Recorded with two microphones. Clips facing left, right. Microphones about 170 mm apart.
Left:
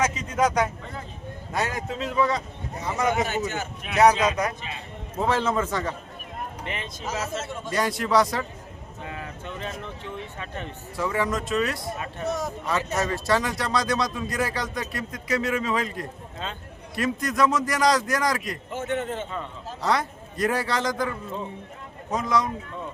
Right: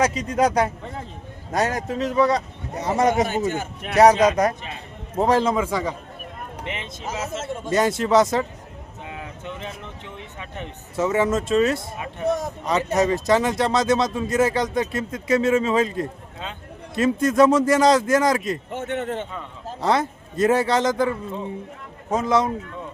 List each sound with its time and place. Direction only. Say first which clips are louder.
0.0 s a man's voice: right 4 dB; 35° right (ahead or behind)
5.5 s a man's voice: right 3 dB; 10° right (ahead or behind)
6.7 s speech: right 3 dB; 25° right (ahead or behind)
9.0 s a sound: right 2 dB; 15° right (ahead or behind)
10.4 s speech: even; 15° right (ahead or behind)
18.7 s speech: left 3 dB; 65° right (ahead or behind)
19.8 s speech: right 4 dB; 25° right (ahead or behind)
22.1 s speech: right 4 dB; 25° right (ahead or behind)